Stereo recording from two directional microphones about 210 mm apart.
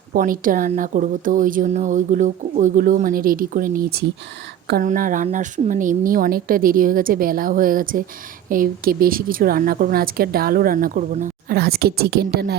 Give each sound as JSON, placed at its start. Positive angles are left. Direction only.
{"t": 0.1, "sound": "a woman's voice", "side_deg": -40}